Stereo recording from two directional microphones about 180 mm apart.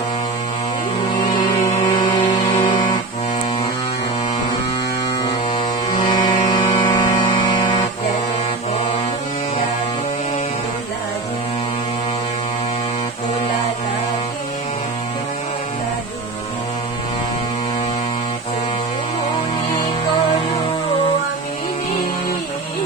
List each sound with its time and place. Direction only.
1.3 s music: 25° left (ahead or behind)
6.0 s music: 25° left (ahead or behind)